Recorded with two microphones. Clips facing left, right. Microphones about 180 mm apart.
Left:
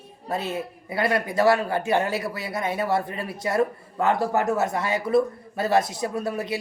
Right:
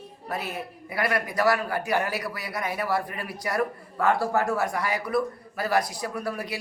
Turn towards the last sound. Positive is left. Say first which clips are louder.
# left 4 dB
turn(degrees=25)  # may be behind; listen again after turning